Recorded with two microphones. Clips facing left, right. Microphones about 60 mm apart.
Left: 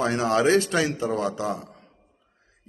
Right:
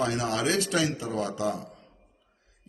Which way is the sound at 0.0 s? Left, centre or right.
Left.